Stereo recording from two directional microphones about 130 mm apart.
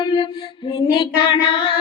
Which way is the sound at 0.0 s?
40° left (ahead or behind).